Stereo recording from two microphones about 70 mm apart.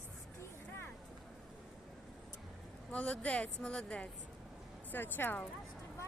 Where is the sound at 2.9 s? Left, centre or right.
Centre.